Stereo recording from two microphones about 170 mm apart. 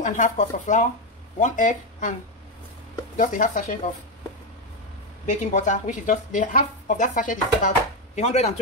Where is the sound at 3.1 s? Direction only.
50° left (ahead or behind).